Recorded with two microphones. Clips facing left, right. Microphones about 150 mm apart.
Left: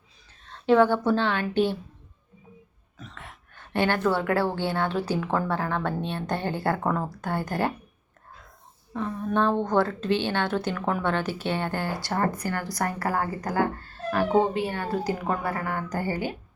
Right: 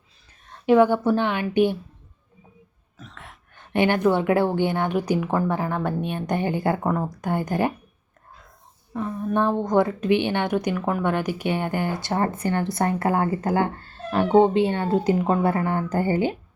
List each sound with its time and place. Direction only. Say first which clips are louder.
0.3 s speech: right 2 dB; 10° right (ahead or behind)
3.0 s a sound: even; centre (ahead or behind)
3.5 s a woman's voice: right 4 dB; 15° right (ahead or behind)
8.9 s a woman's voice: right 2 dB; 10° right (ahead or behind)